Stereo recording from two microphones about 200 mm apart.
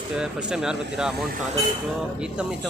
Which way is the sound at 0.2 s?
5° right (ahead or behind).